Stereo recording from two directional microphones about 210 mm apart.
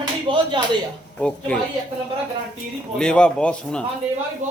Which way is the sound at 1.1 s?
5° left (ahead or behind).